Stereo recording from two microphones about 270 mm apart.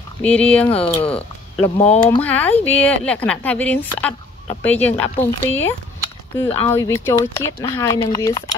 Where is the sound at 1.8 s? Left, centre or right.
Left.